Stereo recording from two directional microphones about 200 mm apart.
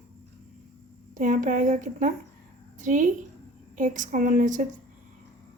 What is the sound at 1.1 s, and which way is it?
A woman's voice, 40° right (ahead or behind).